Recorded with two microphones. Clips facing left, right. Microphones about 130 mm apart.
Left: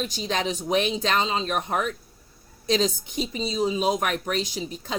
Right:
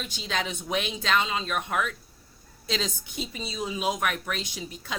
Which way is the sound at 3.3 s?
30° left (ahead or behind).